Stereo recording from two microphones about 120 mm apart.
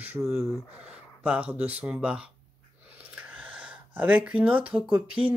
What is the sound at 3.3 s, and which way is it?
Speech, 10° right (ahead or behind).